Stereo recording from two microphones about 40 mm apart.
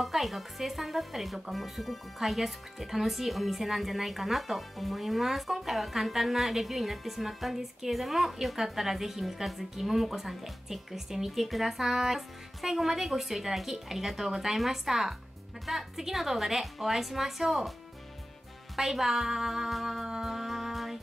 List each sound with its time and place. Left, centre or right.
0.0 s a woman's voice: centre
18.8 s music: centre